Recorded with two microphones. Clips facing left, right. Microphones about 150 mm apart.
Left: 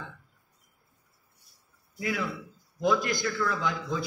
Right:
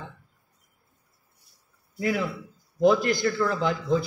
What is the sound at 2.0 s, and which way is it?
Speech, 40° right (ahead or behind).